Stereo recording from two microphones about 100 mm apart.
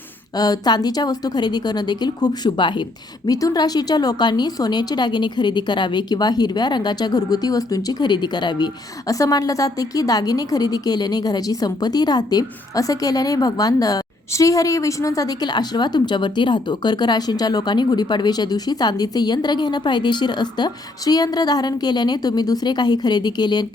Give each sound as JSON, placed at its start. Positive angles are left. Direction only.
{"t": 0.3, "sound": "a woman's voice", "side_deg": 40}
{"t": 3.2, "sound": "a woman's voice", "side_deg": 40}